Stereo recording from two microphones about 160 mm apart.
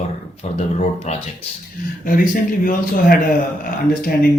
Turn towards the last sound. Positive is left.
turn(degrees=65)  # may be behind; listen again after turning